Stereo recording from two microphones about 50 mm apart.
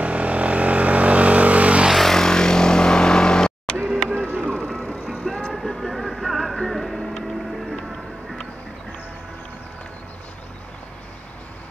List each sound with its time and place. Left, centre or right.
0.0 s vehicle: right
2.0 s vehicle: centre
3.7 s printer: centre
4.4 s music: centre
5.1 s music: centre